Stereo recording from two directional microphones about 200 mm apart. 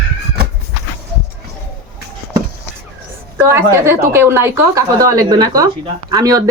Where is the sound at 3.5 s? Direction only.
15° right (ahead or behind).